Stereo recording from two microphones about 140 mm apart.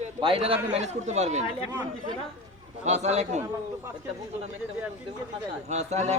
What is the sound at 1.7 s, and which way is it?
Speech, 30° right (ahead or behind).